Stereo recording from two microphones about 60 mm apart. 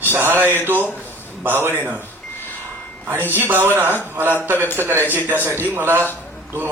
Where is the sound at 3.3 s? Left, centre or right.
Right.